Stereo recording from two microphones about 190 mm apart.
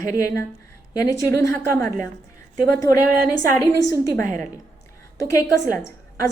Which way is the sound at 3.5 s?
15° left (ahead or behind).